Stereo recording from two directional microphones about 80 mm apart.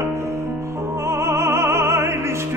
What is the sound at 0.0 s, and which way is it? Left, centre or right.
Music, right.